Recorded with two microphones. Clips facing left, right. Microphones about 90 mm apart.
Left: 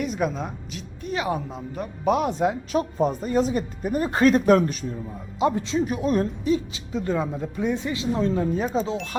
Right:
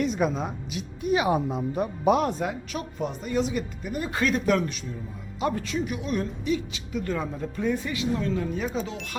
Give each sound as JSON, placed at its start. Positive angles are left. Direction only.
{"t": 0.0, "sound": "speech", "side_deg": 0}
{"t": 2.0, "sound": "speech", "side_deg": 0}
{"t": 2.4, "sound": "speech", "side_deg": 30}
{"t": 5.4, "sound": "speech", "side_deg": 20}